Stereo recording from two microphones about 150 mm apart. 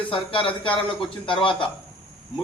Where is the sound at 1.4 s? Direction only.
35° left (ahead or behind).